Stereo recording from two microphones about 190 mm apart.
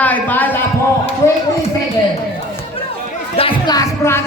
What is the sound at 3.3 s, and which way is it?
Speech, 25° left (ahead or behind).